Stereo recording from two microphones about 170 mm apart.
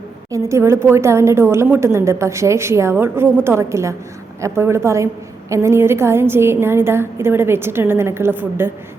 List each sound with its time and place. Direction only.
0.3 s a woman's voice: 15° right (ahead or behind)